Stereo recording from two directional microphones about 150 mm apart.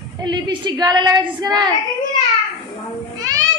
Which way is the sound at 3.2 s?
25° right (ahead or behind).